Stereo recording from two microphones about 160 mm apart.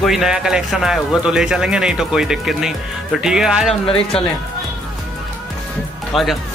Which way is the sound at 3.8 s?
35° left (ahead or behind).